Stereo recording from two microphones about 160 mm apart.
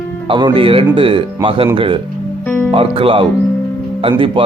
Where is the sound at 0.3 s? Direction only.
30° right (ahead or behind).